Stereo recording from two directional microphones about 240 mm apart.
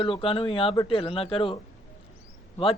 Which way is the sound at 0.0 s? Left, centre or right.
Left.